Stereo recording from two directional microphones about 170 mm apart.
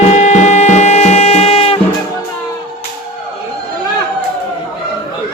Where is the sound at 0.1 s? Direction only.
40° left (ahead or behind).